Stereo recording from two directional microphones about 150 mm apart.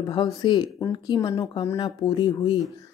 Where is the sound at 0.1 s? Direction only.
30° left (ahead or behind).